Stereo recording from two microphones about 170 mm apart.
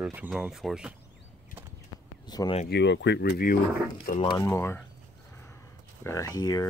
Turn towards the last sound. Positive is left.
turn(degrees=20)  # may be behind; listen again after turning